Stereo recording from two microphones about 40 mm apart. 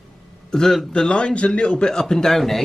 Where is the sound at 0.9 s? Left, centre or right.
Left; by 2.6 s centre.